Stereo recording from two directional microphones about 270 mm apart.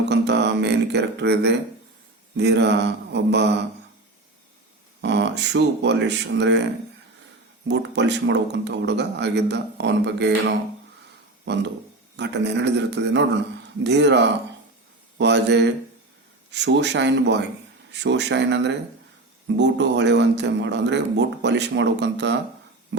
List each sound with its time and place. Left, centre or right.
0.0 s music: right
2.3 s a man's voice: right
4.9 s a man's voice: right
7.7 s a man's voice: right
11.5 s a man's voice: right